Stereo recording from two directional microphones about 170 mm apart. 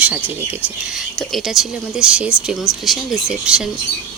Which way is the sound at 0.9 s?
Centre (ahead or behind).